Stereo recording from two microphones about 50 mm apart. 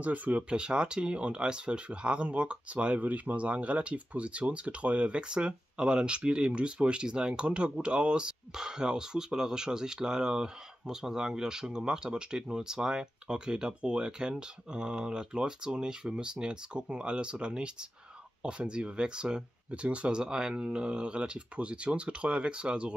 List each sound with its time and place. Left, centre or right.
0.0 s speech: right